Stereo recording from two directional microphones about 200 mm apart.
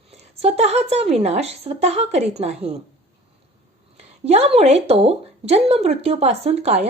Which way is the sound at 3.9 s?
30° right (ahead or behind).